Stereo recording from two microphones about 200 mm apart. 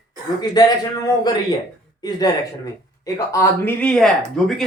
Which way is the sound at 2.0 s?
20° left (ahead or behind).